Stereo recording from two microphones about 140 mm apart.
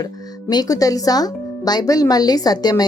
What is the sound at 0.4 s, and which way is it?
Speech, 25° left (ahead or behind).